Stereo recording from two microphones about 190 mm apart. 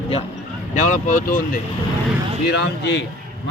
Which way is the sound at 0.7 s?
40° left (ahead or behind).